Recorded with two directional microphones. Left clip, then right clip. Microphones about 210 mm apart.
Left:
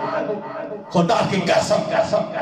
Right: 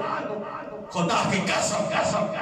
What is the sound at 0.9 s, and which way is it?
A man's voice, 30° left (ahead or behind).